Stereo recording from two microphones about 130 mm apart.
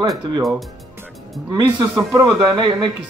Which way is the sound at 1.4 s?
35° right (ahead or behind).